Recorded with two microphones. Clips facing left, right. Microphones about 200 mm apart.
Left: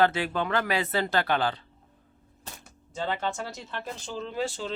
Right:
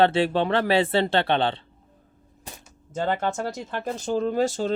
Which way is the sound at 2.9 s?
50° right (ahead or behind).